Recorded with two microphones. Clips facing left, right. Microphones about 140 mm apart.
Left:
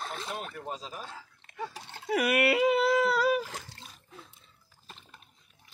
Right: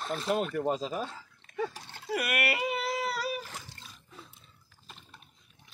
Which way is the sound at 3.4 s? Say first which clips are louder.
Left 7 dB; 90° left.